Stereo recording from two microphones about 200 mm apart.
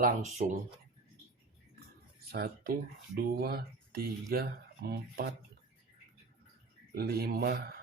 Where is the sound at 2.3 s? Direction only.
50° right (ahead or behind).